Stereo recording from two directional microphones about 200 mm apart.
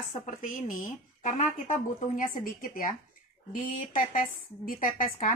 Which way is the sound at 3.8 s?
40° left (ahead or behind).